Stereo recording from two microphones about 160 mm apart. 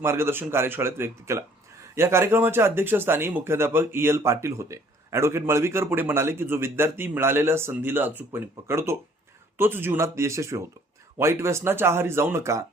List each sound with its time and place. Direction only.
0.0 s speech: 15° right (ahead or behind)